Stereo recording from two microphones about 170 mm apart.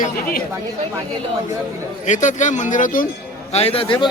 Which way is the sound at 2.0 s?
45° left (ahead or behind).